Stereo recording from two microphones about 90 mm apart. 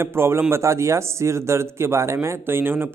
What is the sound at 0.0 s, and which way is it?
A man's voice, 30° right (ahead or behind).